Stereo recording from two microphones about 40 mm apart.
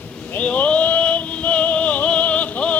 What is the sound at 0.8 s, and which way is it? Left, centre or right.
Music, left.